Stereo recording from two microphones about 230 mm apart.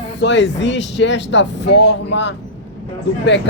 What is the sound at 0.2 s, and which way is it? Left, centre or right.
Speech, left.